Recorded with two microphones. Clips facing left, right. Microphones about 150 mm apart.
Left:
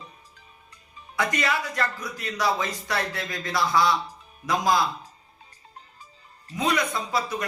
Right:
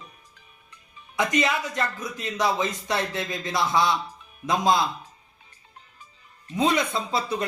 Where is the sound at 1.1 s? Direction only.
20° right (ahead or behind).